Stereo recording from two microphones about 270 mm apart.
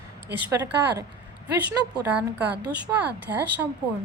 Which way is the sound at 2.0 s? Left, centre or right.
Centre.